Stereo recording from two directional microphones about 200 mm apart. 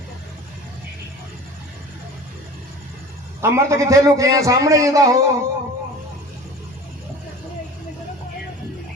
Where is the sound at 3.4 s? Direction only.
15° right (ahead or behind).